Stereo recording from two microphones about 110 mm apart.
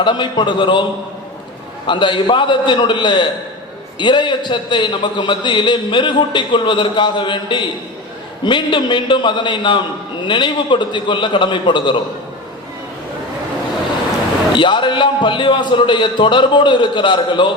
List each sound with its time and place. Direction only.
0.0 s a man's voice: 45° left (ahead or behind)
1.9 s a man's voice: 45° left (ahead or behind)
14.5 s a man's voice: 45° left (ahead or behind)